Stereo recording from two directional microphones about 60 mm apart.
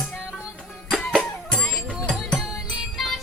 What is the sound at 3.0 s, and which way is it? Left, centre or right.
Music, centre.